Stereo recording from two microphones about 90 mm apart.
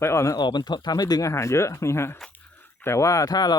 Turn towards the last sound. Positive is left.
turn(degrees=50)  # may be behind; listen again after turning